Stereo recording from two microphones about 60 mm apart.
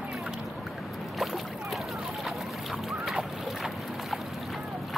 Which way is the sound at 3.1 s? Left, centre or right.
Centre.